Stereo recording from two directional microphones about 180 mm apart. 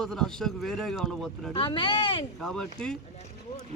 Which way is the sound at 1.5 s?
30° left (ahead or behind).